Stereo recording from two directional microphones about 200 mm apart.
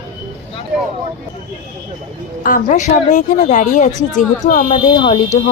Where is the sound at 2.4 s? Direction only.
40° left (ahead or behind).